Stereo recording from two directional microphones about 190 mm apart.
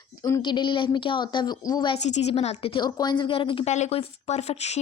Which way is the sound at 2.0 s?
35° left (ahead or behind).